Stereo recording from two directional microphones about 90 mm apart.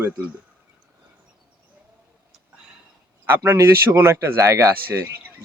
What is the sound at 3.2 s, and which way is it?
Speech, 25° right (ahead or behind).